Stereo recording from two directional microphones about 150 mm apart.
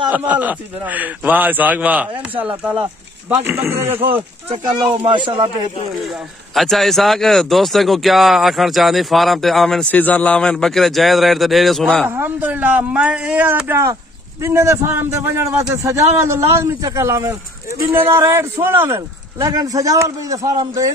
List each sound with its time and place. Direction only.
0.1 s a man's voice: 10° right (ahead or behind)
4.1 s speech: 40° right (ahead or behind)
6.1 s speech: centre (ahead or behind)
12.1 s a man's voice: 10° right (ahead or behind)